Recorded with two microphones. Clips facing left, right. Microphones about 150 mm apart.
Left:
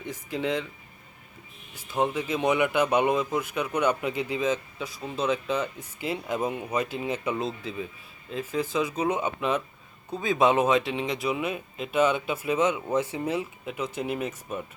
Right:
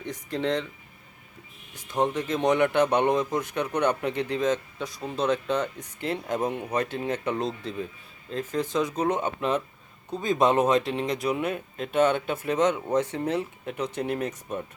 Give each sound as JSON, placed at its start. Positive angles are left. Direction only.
{"t": 0.0, "sound": "a sound", "side_deg": 5}
{"t": 1.7, "sound": "speech", "side_deg": 5}
{"t": 9.4, "sound": "speech", "side_deg": -35}
{"t": 10.1, "sound": "speech", "side_deg": 5}